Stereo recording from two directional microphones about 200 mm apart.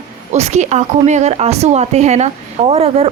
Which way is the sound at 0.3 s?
35° right (ahead or behind).